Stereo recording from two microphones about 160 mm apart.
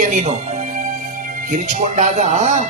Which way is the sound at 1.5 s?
50° right (ahead or behind).